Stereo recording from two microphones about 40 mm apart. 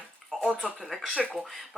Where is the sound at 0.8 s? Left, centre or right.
Centre.